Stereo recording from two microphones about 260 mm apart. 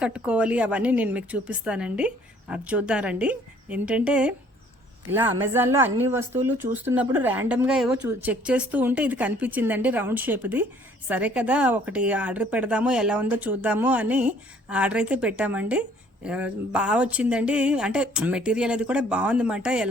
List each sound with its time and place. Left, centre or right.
0.0 s speech: centre